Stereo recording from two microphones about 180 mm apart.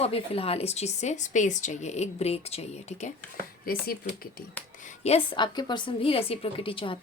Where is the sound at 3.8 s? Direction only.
60° left (ahead or behind).